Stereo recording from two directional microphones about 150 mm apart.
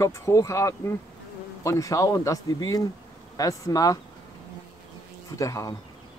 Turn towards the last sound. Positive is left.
turn(degrees=20)  # may be behind; listen again after turning